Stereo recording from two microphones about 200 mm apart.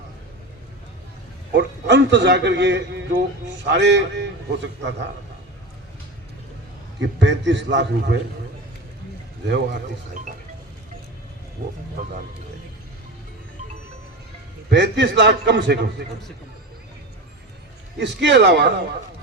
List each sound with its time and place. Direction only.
1.5 s a man's voice: 60° right (ahead or behind)
7.2 s a man's voice: 60° right (ahead or behind)
11.6 s speech: 40° right (ahead or behind)
14.7 s a man's voice: 60° right (ahead or behind)
17.9 s a man's voice: 60° right (ahead or behind)